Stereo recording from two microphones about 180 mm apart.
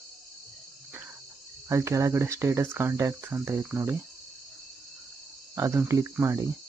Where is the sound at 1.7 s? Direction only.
15° right (ahead or behind).